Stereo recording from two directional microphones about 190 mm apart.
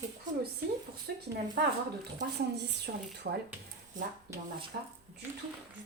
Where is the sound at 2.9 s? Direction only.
55° right (ahead or behind).